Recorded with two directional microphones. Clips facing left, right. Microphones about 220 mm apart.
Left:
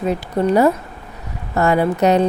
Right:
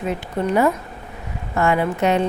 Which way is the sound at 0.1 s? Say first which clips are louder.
Left 4 dB; 40° left (ahead or behind).